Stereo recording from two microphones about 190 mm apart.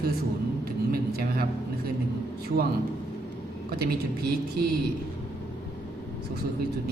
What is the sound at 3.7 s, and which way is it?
Speech, 55° right (ahead or behind).